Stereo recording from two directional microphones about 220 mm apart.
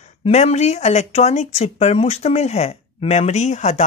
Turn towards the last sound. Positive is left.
turn(degrees=35)  # may be behind; listen again after turning